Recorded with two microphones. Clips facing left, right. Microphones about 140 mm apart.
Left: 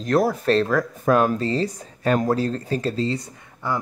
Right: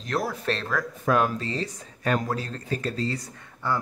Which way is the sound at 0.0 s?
45° left (ahead or behind).